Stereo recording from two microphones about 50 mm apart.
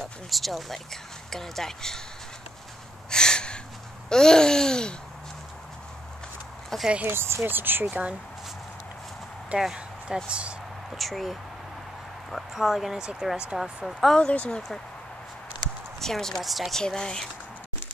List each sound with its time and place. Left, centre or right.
0.3 s speech: centre
3.1 s a sound: centre
6.7 s speech: centre
7.1 s speech: right
7.4 s speech: right
7.8 s speech: right
9.5 s speech: right
10.9 s speech: centre
13.0 s speech: centre
14.1 s speech: centre
16.0 s speech: centre
16.8 s speech: centre